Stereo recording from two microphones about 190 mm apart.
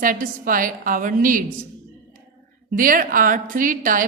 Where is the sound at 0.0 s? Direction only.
45° right (ahead or behind).